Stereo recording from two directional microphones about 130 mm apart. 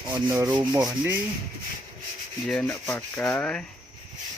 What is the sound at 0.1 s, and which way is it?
Rub, 15° right (ahead or behind).